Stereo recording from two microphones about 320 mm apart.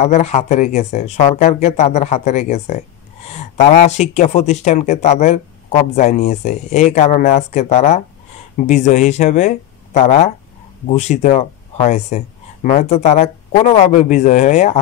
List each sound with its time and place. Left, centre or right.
0.0 s speech: left